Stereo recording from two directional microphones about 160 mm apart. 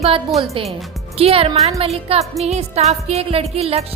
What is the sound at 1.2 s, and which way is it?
Music, 35° right (ahead or behind).